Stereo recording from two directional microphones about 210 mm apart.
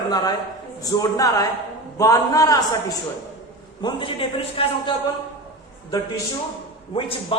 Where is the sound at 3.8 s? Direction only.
25° left (ahead or behind).